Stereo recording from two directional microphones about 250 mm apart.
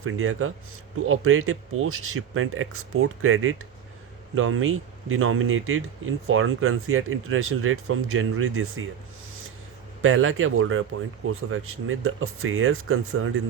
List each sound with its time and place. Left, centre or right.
0.0 s speech: right
10.0 s speech: right